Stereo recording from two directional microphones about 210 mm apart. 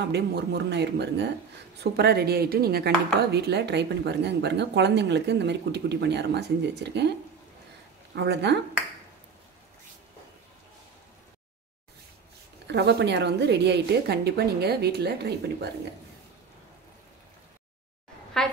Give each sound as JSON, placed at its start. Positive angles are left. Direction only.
{"t": 0.1, "sound": "speech", "side_deg": -55}
{"t": 12.6, "sound": "speech", "side_deg": -55}
{"t": 18.4, "sound": "a woman's voice", "side_deg": 5}